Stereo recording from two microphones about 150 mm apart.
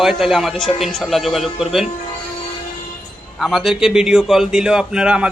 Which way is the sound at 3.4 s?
Centre (ahead or behind).